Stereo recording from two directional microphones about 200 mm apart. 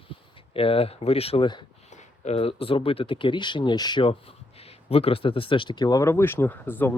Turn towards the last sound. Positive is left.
turn(degrees=10)  # may be behind; listen again after turning